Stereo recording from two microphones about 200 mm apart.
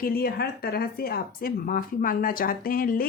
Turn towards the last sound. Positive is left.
turn(degrees=45)  # may be behind; listen again after turning